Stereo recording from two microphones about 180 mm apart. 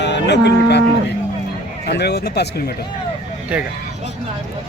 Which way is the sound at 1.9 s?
65° left (ahead or behind).